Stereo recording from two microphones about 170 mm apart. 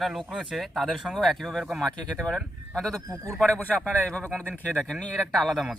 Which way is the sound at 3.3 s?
5° left (ahead or behind).